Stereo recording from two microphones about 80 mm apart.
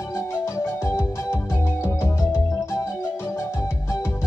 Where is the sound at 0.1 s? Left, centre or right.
Left.